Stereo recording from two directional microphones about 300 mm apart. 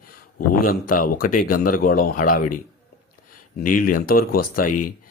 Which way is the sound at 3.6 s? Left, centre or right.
Left.